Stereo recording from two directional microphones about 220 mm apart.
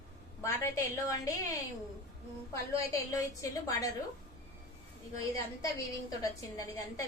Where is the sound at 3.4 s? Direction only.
15° left (ahead or behind).